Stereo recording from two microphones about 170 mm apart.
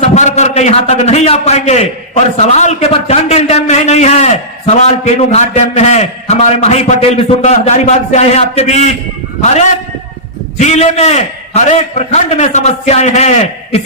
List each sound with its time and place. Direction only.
0.0 s a man's voice: 40° left (ahead or behind)